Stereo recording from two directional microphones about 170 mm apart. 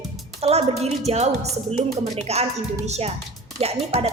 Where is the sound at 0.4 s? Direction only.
40° right (ahead or behind).